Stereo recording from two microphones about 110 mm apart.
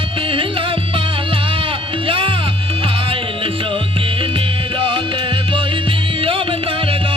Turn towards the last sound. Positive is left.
turn(degrees=-55)  # may be behind; listen again after turning